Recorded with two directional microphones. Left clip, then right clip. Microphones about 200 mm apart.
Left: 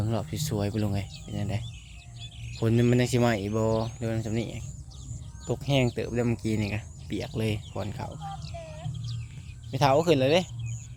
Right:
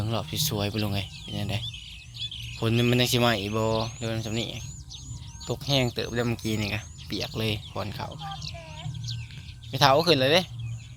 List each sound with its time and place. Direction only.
0.0 s speech: 25° left (ahead or behind)
1.7 s bird: 45° left (ahead or behind)
2.6 s speech: 15° left (ahead or behind)
3.7 s a sound: 5° left (ahead or behind)
4.0 s speech: 20° left (ahead or behind)
9.7 s speech: 15° left (ahead or behind)